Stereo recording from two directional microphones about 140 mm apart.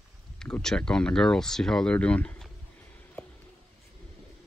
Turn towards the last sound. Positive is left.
turn(degrees=5)  # may be behind; listen again after turning